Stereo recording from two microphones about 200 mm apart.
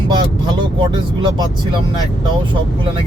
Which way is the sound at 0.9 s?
20° right (ahead or behind).